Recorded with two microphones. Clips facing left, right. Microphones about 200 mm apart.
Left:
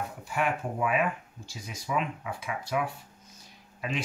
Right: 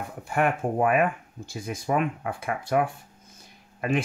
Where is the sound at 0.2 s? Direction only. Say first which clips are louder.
Right 6 dB; 55° right (ahead or behind).